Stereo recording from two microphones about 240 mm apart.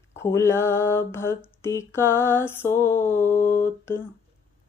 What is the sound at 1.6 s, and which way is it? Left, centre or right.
Mantra, centre.